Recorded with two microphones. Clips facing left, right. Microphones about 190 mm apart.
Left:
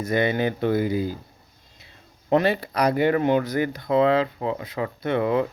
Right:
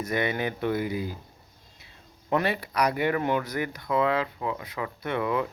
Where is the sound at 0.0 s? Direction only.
30° left (ahead or behind).